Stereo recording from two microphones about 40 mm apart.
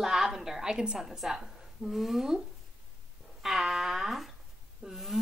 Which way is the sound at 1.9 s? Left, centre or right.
Centre.